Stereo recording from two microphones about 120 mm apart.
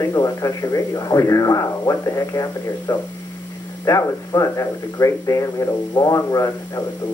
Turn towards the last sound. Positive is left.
turn(degrees=25)  # may be behind; listen again after turning